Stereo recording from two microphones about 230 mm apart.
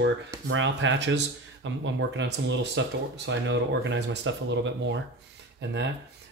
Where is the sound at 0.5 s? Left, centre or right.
Right.